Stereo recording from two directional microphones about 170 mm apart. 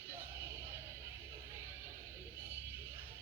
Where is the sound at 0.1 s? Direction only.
15° right (ahead or behind).